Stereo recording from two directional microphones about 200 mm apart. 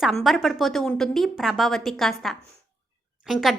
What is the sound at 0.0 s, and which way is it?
A woman's voice, centre (ahead or behind).